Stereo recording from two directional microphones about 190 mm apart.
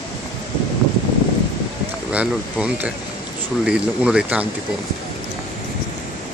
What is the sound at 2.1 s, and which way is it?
Speech, 5° right (ahead or behind).